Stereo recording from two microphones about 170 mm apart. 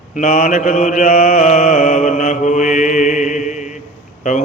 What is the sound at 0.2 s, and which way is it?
Mantra, 50° left (ahead or behind).